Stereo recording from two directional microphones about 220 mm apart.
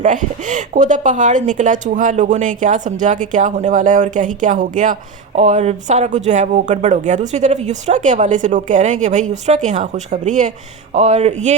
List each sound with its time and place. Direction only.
0.0 s speech: 35° right (ahead or behind)